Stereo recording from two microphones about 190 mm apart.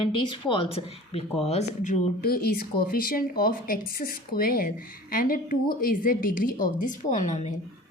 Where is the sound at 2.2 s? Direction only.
55° left (ahead or behind); by 7.5 s 40° left (ahead or behind).